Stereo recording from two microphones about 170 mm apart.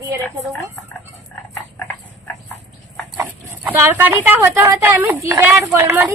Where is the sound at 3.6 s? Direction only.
10° right (ahead or behind).